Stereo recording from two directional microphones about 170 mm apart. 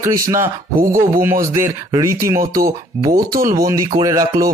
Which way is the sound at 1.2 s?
15° right (ahead or behind).